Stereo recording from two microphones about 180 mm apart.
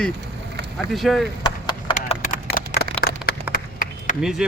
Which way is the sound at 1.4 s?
25° left (ahead or behind).